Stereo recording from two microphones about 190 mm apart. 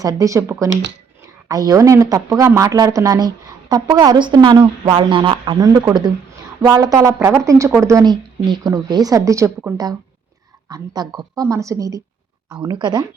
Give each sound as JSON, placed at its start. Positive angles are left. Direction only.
{"t": 0.0, "sound": "a woman's voice", "side_deg": -20}
{"t": 0.7, "sound": "speech", "side_deg": -70}
{"t": 1.5, "sound": "a woman's voice", "side_deg": -20}
{"t": 10.7, "sound": "a woman's voice", "side_deg": -20}